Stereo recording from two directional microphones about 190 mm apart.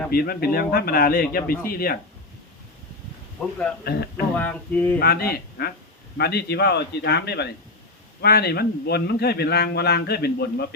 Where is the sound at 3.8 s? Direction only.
55° left (ahead or behind).